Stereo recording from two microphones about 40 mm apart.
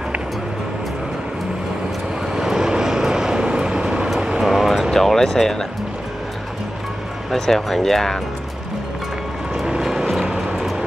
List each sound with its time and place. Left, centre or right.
2.3 s vehicle: centre
4.4 s vehicle: centre
4.9 s a sound: centre
7.2 s speech: centre
9.7 s vehicle: centre